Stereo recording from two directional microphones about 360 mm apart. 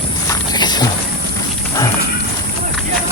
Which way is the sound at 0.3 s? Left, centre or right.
Centre.